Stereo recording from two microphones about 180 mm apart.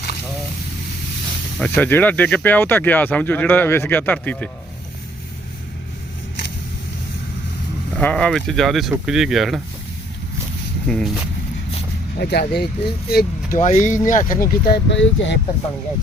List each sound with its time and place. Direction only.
1.5 s speech: 5° left (ahead or behind)
7.9 s speech: 5° left (ahead or behind)
10.8 s speech: 5° left (ahead or behind)
12.2 s speech: 65° left (ahead or behind)
13.6 s speech: 40° left (ahead or behind)
14.4 s speech: 70° left (ahead or behind); by 15.4 s 90° left